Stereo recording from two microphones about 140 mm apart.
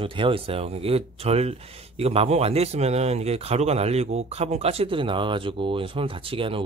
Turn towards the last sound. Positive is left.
turn(degrees=-40)  # may be behind; listen again after turning